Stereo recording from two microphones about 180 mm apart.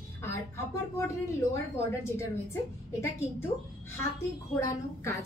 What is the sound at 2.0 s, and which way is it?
Speech, 15° left (ahead or behind).